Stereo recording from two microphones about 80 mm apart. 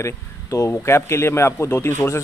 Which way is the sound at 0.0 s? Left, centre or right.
Left.